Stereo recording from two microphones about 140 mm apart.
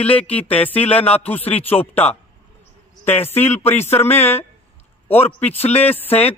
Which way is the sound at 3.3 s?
15° left (ahead or behind).